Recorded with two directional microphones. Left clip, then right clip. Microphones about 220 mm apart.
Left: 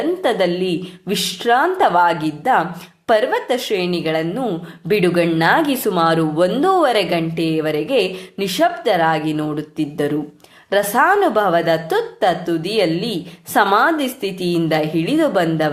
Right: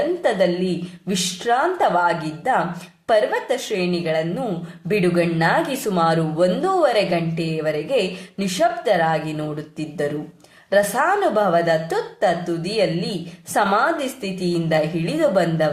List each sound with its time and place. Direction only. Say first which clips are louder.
0.2 s a woman's voice: left 2 dB; 35° left (ahead or behind)